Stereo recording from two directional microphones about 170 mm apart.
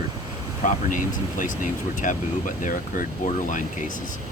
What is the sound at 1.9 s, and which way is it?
Speech, 50° left (ahead or behind).